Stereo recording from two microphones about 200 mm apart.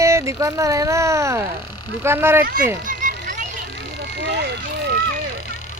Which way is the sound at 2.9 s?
40° right (ahead or behind).